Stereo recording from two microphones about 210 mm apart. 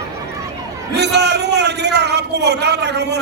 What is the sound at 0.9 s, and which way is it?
A man's voice, 55° right (ahead or behind).